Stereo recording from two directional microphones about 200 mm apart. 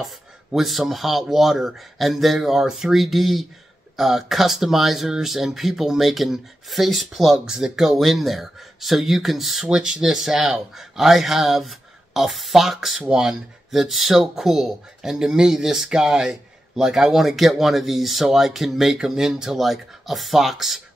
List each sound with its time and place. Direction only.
0.0 s speech: centre (ahead or behind)